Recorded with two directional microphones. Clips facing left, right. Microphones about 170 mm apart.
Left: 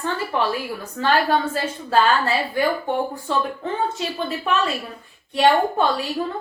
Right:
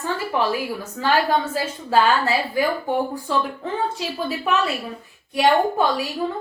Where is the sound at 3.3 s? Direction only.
5° right (ahead or behind).